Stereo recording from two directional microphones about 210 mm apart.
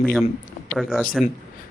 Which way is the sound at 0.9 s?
Centre (ahead or behind).